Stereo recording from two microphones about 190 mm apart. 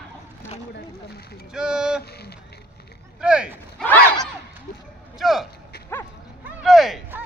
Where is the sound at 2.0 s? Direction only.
55° left (ahead or behind).